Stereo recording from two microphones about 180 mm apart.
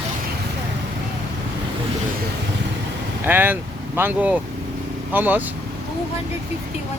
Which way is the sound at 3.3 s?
10° right (ahead or behind).